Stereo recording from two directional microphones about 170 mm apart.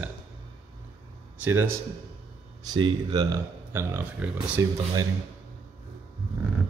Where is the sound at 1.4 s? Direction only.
15° right (ahead or behind).